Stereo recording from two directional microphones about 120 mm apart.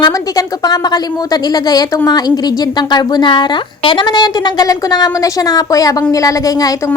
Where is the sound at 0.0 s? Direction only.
35° left (ahead or behind).